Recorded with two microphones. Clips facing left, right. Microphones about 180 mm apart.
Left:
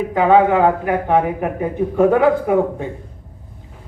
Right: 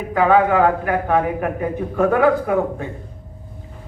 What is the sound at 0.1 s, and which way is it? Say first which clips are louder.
A man's voice: left 1 dB; 25° left (ahead or behind).